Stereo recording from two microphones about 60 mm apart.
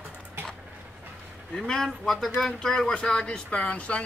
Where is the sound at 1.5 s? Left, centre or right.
Centre.